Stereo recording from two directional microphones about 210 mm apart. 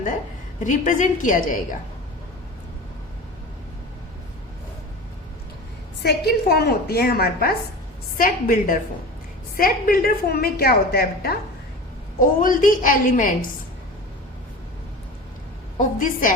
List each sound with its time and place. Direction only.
0.6 s a woman's voice: 35° left (ahead or behind)
6.0 s a woman's voice: 50° left (ahead or behind)